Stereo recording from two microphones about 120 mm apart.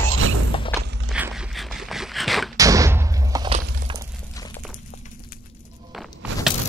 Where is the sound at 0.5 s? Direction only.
45° left (ahead or behind).